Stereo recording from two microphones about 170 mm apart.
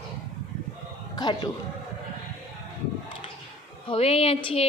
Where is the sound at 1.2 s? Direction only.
25° left (ahead or behind).